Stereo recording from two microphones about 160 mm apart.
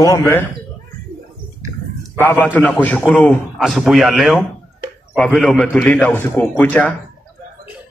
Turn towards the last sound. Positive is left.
turn(degrees=5)  # may be behind; listen again after turning